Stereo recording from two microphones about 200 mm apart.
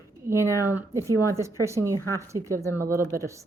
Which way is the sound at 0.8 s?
15° right (ahead or behind).